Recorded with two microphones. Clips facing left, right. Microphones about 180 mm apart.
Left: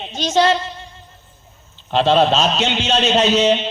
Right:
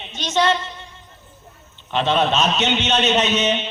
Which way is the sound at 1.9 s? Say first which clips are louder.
Left 4 dB; 30° left (ahead or behind).